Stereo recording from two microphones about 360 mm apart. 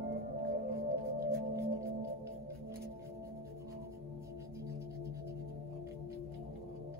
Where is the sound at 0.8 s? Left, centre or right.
Right.